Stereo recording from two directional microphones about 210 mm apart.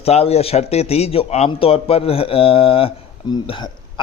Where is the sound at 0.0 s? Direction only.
30° left (ahead or behind).